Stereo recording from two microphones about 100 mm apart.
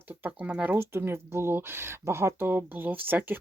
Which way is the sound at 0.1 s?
15° right (ahead or behind).